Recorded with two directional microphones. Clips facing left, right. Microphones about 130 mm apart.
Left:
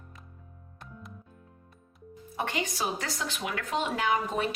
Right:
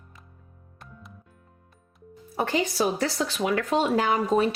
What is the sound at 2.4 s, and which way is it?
Speech, 35° right (ahead or behind).